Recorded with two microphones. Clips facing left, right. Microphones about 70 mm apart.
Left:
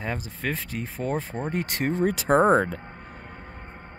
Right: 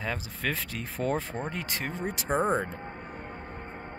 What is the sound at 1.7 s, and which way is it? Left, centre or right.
Speech, left.